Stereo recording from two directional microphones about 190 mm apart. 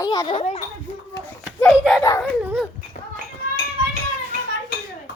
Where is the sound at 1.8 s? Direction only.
Centre (ahead or behind).